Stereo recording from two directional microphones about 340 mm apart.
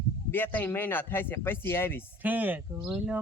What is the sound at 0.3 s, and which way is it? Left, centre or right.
Speech, centre.